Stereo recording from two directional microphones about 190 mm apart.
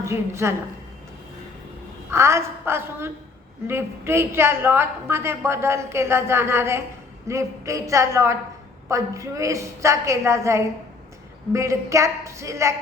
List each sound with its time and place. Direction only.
0.0 s a woman's voice: 15° right (ahead or behind)
2.0 s a woman's voice: 15° right (ahead or behind)